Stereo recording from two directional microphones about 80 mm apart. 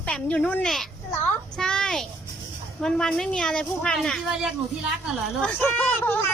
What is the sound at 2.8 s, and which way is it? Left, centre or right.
A woman's voice, centre.